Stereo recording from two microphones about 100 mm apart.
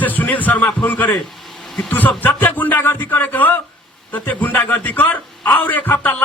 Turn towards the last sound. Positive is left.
turn(degrees=15)  # may be behind; listen again after turning